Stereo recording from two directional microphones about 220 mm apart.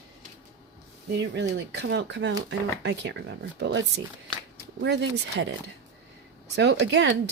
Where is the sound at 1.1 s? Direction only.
55° right (ahead or behind).